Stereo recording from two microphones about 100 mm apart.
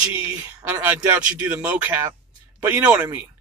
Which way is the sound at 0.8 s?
15° right (ahead or behind).